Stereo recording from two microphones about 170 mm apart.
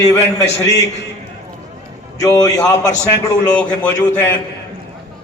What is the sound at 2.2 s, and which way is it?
A man's voice, 20° left (ahead or behind).